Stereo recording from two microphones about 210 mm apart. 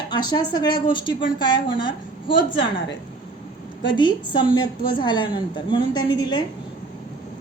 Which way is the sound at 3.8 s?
20° left (ahead or behind).